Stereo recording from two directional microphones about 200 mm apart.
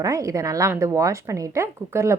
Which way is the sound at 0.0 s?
15° right (ahead or behind).